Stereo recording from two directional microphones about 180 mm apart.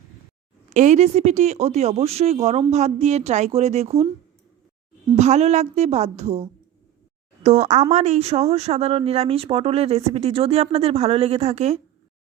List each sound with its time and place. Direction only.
0.7 s speech: 40° right (ahead or behind)
5.1 s speech: 40° right (ahead or behind)